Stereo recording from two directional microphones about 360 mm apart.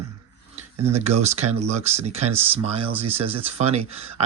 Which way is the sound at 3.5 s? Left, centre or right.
Centre.